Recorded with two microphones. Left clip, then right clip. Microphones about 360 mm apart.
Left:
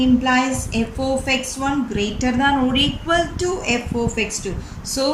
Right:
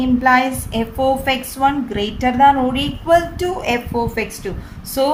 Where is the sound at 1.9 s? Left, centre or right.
Centre.